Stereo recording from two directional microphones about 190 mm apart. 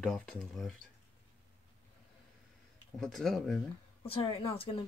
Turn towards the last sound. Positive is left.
turn(degrees=30)  # may be behind; listen again after turning